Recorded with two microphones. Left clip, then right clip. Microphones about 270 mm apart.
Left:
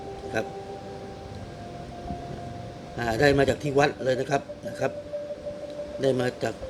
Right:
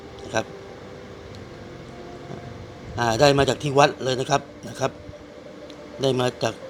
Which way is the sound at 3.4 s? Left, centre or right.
Centre.